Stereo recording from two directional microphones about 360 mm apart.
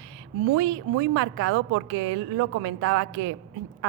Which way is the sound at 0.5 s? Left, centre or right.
Right.